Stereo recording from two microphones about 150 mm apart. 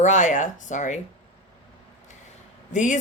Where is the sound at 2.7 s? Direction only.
55° left (ahead or behind).